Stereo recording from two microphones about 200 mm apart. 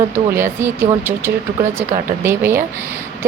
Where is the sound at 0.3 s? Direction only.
10° right (ahead or behind).